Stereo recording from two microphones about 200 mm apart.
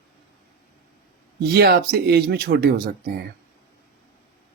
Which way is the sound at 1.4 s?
55° right (ahead or behind).